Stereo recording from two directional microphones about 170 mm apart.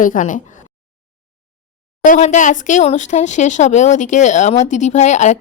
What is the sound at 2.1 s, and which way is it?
Speech, 45° left (ahead or behind).